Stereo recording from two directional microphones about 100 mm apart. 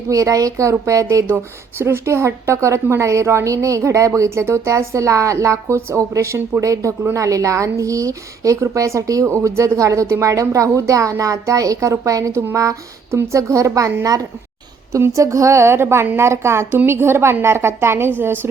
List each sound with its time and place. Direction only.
0.1 s a woman's voice: 35° right (ahead or behind)